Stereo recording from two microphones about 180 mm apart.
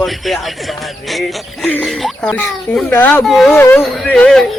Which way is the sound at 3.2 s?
Centre (ahead or behind).